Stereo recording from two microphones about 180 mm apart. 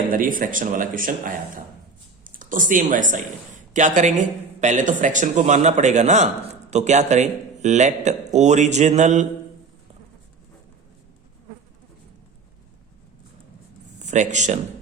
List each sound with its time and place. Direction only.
0.1 s speech: 50° right (ahead or behind)
14.0 s speech: 40° right (ahead or behind)